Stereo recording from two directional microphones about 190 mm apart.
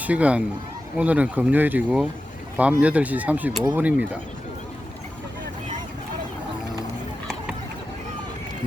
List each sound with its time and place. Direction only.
0.0 s speech: 5° right (ahead or behind)